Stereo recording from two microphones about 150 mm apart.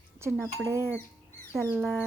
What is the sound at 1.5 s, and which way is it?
Speech, 10° right (ahead or behind).